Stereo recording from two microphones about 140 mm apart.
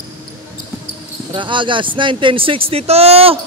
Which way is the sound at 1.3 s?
35° right (ahead or behind).